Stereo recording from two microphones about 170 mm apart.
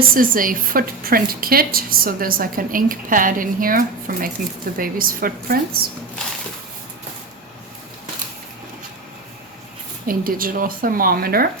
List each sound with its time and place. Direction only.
0.1 s a woman's voice: 55° right (ahead or behind)
10.1 s a woman's voice: 55° right (ahead or behind)